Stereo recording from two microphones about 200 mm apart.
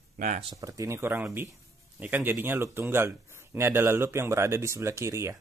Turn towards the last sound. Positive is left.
turn(degrees=-15)  # may be behind; listen again after turning